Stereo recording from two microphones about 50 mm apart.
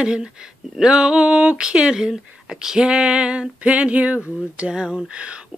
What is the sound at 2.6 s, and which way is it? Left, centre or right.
Female singing, centre.